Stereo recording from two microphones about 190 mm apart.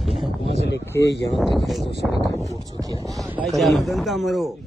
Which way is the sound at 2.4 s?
20° right (ahead or behind).